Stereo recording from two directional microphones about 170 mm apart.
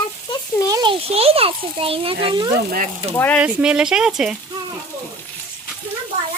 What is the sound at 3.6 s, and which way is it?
Speech, 5° right (ahead or behind).